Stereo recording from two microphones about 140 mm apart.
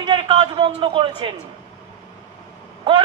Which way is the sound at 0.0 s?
35° right (ahead or behind).